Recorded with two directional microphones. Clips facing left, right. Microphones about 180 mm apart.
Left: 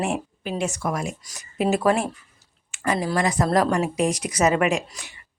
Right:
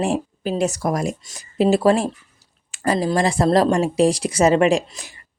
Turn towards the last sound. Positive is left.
turn(degrees=-35)  # may be behind; listen again after turning